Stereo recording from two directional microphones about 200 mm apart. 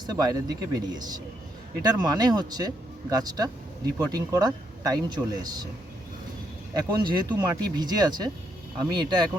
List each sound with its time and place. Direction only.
0.0 s speech: 20° right (ahead or behind)
6.7 s speech: 20° right (ahead or behind)